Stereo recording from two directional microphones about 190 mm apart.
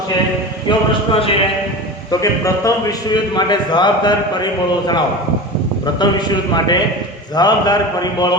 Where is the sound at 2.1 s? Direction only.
15° left (ahead or behind).